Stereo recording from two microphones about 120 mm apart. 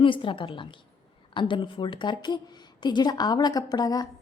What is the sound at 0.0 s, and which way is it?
A woman's voice, 45° left (ahead or behind).